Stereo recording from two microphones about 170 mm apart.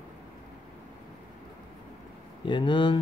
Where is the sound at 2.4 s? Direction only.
30° left (ahead or behind).